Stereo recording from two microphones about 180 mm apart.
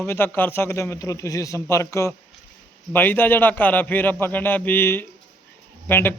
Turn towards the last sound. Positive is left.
turn(degrees=10)  # may be behind; listen again after turning